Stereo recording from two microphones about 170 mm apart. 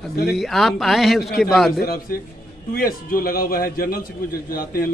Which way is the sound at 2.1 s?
55° left (ahead or behind).